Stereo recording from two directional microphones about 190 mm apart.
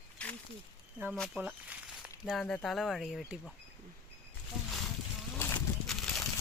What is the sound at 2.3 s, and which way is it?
Speech, 5° left (ahead or behind).